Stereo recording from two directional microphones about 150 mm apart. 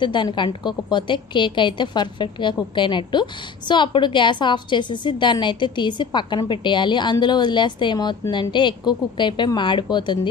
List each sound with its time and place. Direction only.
0.0 s a woman's voice: 30° left (ahead or behind)